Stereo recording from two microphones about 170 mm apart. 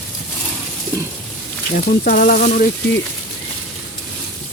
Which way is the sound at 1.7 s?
50° left (ahead or behind).